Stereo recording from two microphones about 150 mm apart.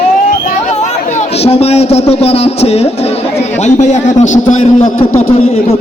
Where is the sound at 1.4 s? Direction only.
40° left (ahead or behind).